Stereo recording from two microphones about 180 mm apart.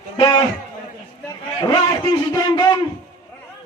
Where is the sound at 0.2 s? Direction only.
25° left (ahead or behind).